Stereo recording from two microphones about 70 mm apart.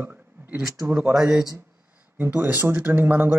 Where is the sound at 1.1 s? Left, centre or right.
Centre.